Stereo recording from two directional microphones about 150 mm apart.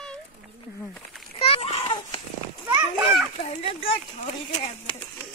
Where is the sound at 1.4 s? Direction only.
40° left (ahead or behind).